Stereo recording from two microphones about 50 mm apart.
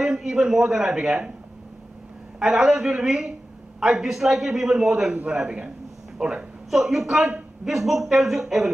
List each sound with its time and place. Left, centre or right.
0.0 s a man's voice: centre
2.4 s a man's voice: centre
5.1 s a man's voice: right
5.4 s a man's voice: centre